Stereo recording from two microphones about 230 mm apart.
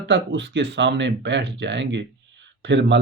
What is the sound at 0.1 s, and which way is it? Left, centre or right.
Speech, right.